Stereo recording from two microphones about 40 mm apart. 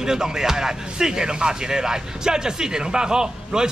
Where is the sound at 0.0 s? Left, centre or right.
Centre.